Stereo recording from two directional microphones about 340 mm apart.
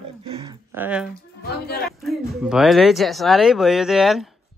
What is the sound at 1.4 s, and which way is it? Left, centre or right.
Speech, left.